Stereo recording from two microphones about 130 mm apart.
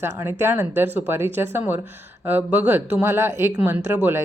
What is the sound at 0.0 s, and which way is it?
Speech, 20° right (ahead or behind).